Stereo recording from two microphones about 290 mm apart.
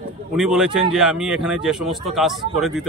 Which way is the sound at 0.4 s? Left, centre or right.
Centre.